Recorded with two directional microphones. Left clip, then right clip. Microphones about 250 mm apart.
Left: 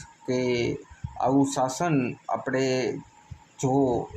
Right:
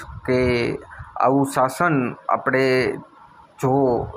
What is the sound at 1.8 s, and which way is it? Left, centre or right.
Speech, centre.